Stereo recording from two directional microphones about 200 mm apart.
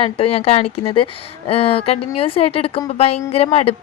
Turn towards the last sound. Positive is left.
turn(degrees=30)  # may be behind; listen again after turning